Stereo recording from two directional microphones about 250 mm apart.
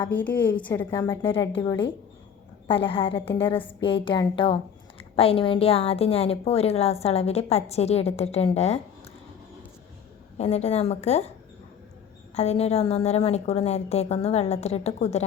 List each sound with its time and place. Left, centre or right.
0.0 s a woman's voice: centre
1.2 s a woman's voice: left
10.3 s a woman's voice: left
12.3 s a woman's voice: left